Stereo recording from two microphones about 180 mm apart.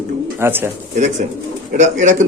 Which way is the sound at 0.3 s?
15° right (ahead or behind).